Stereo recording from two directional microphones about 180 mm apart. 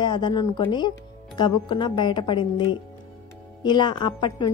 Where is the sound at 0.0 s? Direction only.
25° left (ahead or behind).